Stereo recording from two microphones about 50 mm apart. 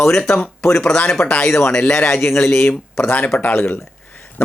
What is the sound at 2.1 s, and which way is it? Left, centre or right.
Speech, left.